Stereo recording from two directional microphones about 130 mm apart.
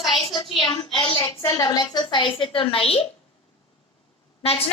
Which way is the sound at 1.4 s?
30° left (ahead or behind).